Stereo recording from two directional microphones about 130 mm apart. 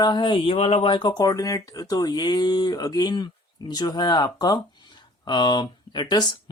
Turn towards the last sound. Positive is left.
turn(degrees=35)  # may be behind; listen again after turning